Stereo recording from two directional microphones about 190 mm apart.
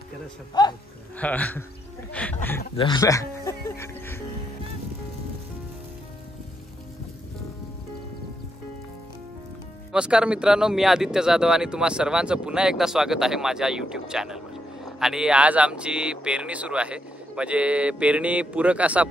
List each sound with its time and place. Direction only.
0.6 s speech: 25° left (ahead or behind)
1.1 s speech: 10° left (ahead or behind)
2.8 s music: 20° left (ahead or behind)
9.9 s speech: 5° right (ahead or behind)